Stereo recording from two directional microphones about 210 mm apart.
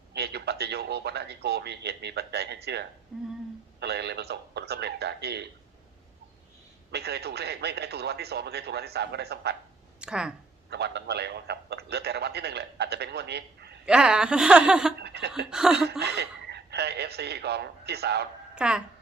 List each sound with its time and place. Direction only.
0.1 s speech: 50° right (ahead or behind)
3.1 s speech: centre (ahead or behind)
3.8 s a man's voice: 50° right (ahead or behind)
6.9 s a man's voice: 50° right (ahead or behind)
10.0 s speech: 5° right (ahead or behind)
10.7 s a man's voice: 50° right (ahead or behind)
13.8 s speech: 5° right (ahead or behind)
15.0 s chuckle: 50° right (ahead or behind)
15.4 s speech: 5° right (ahead or behind)
15.9 s speech: 50° right (ahead or behind)
18.5 s speech: 5° right (ahead or behind)